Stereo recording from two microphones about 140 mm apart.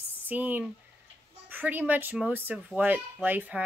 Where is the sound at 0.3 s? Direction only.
15° right (ahead or behind).